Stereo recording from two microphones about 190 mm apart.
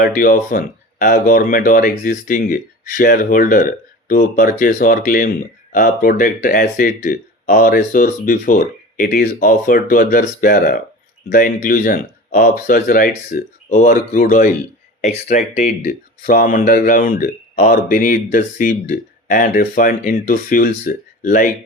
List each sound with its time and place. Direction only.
0.0 s speech: 45° left (ahead or behind)
15.0 s speech: 40° left (ahead or behind)